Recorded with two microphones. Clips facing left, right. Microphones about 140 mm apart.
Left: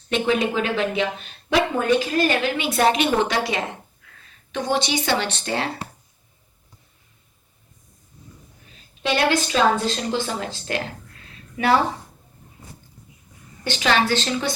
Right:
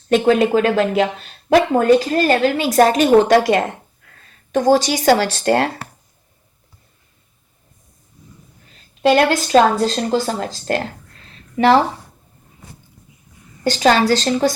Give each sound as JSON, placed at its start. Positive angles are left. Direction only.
{"t": 0.1, "sound": "speech", "side_deg": -45}
{"t": 9.0, "sound": "speech", "side_deg": -45}
{"t": 13.7, "sound": "a woman's voice", "side_deg": -35}